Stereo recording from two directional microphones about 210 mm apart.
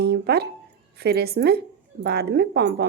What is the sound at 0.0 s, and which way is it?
A woman's voice, 50° right (ahead or behind).